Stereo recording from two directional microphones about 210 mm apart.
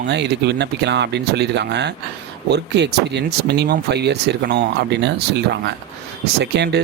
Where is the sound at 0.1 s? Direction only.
55° right (ahead or behind).